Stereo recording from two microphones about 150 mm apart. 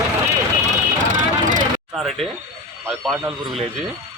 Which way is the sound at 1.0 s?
60° right (ahead or behind).